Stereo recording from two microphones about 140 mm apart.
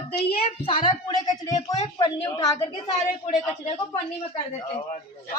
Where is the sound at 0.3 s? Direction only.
45° left (ahead or behind); by 2.9 s 25° left (ahead or behind).